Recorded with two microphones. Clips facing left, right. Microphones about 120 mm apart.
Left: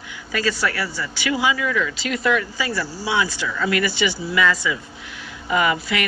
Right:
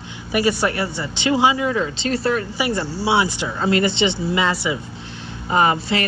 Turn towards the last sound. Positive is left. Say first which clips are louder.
# right 3 dB
turn(degrees=-30)  # may be behind; listen again after turning